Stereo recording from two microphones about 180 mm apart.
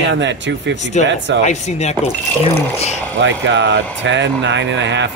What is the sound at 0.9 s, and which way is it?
Speech, 40° left (ahead or behind).